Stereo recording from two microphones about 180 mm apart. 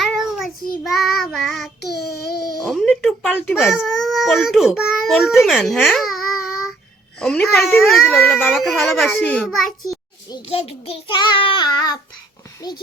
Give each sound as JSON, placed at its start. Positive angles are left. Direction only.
{"t": 0.0, "sound": "child singing", "side_deg": 0}
{"t": 1.8, "sound": "child singing", "side_deg": 65}
{"t": 2.6, "sound": "a sound", "side_deg": 0}
{"t": 3.6, "sound": "a child's voice", "side_deg": 0}
{"t": 7.9, "sound": "a child's voice", "side_deg": 0}
{"t": 10.2, "sound": "child singing", "side_deg": 25}